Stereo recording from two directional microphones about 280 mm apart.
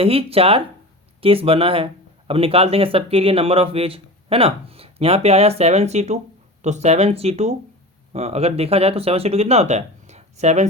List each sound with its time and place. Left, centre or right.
0.0 s speech: right